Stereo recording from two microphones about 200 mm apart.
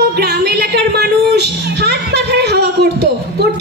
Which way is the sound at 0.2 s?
55° right (ahead or behind).